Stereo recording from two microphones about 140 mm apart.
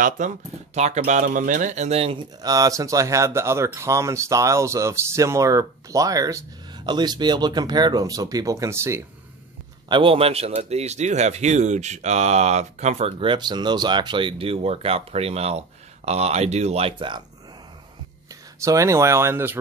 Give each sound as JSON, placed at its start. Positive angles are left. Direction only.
{"t": 0.2, "sound": "speech", "side_deg": -60}
{"t": 2.1, "sound": "speech", "side_deg": -25}
{"t": 9.8, "sound": "a man's voice", "side_deg": -35}
{"t": 13.2, "sound": "a man's voice", "side_deg": -35}
{"t": 18.3, "sound": "speech", "side_deg": -25}